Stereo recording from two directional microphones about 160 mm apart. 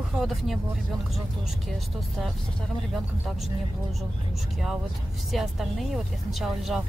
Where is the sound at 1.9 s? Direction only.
Centre (ahead or behind).